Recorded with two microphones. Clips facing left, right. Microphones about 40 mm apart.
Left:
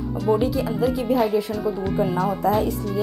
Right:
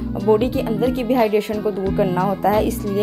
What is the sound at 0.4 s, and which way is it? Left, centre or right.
Speech, right.